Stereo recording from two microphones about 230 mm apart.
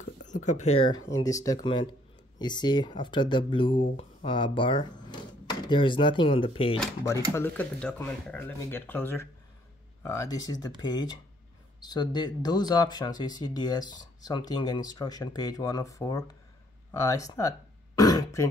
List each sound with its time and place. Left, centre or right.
0.0 s a sound: left
1.0 s speech: centre
7.3 s speech: centre
16.9 s throat clearing: centre